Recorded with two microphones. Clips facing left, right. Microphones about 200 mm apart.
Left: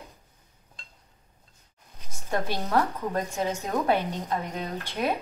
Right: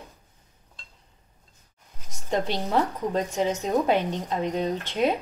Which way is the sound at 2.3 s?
20° right (ahead or behind).